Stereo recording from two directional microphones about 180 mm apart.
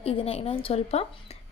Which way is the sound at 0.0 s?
35° left (ahead or behind).